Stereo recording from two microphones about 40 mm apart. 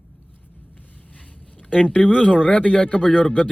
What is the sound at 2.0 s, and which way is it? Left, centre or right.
Speech, centre.